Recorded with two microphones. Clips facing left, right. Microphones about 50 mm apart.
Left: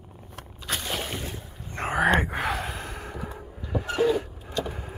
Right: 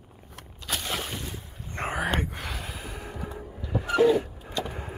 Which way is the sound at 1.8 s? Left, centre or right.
Right.